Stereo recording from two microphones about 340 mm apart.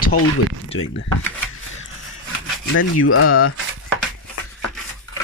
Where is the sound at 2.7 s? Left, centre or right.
Left.